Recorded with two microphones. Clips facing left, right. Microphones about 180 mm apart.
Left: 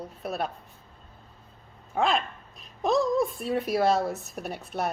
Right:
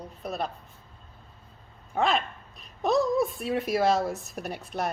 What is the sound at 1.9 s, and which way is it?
Speech, centre (ahead or behind).